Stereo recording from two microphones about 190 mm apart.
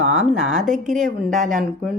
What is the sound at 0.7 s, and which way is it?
Speech, 40° right (ahead or behind).